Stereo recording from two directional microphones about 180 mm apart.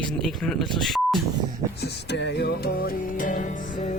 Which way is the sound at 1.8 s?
70° left (ahead or behind).